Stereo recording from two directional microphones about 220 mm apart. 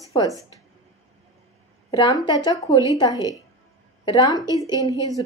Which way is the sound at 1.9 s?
20° left (ahead or behind).